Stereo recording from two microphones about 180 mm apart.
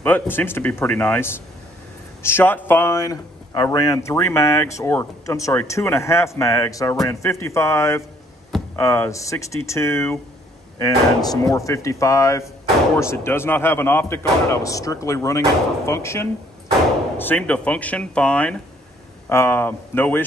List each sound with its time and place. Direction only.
0.0 s speech: 10° left (ahead or behind)